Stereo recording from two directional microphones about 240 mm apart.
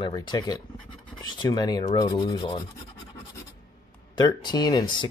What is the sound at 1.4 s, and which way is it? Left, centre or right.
Rub, centre.